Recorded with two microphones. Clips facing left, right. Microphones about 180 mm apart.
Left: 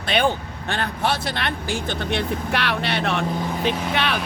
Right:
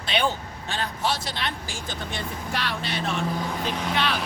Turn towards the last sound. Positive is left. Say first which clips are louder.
# left 3 dB
turn(degrees=65)  # may be behind; listen again after turning